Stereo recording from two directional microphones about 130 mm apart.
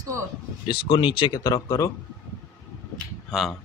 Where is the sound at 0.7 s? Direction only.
40° left (ahead or behind).